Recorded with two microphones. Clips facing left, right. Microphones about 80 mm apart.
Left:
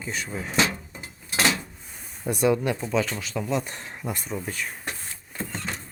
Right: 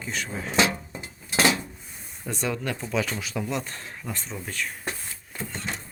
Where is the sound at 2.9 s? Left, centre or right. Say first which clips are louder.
Left 2 dB; centre.